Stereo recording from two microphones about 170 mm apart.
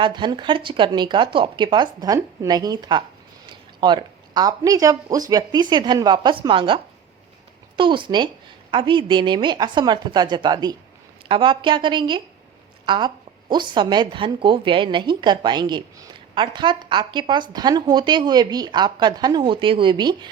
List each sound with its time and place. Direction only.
0.0 s a woman's voice: 25° right (ahead or behind)
7.8 s a woman's voice: 30° right (ahead or behind)